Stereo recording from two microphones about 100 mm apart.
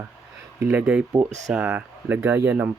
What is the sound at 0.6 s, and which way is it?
Speech, 20° right (ahead or behind).